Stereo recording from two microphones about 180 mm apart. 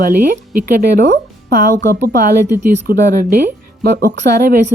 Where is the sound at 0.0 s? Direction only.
50° right (ahead or behind).